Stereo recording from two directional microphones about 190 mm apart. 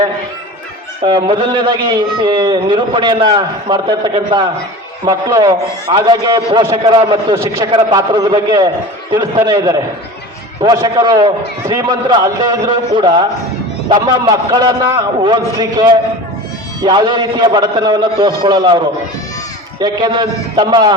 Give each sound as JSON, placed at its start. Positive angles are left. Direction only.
{"t": 1.0, "sound": "a man's voice", "side_deg": -25}
{"t": 16.8, "sound": "a man's voice", "side_deg": -25}
{"t": 19.8, "sound": "a man's voice", "side_deg": -25}